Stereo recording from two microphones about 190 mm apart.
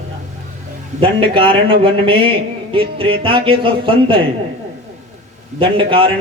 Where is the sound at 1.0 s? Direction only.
30° right (ahead or behind).